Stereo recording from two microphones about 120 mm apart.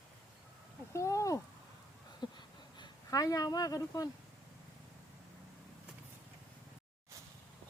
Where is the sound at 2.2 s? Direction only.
40° left (ahead or behind).